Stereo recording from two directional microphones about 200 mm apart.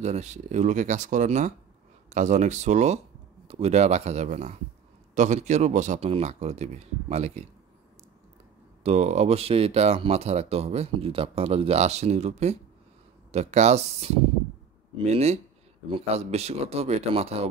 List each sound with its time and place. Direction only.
0.0 s speech: 35° right (ahead or behind)
8.8 s speech: 35° right (ahead or behind)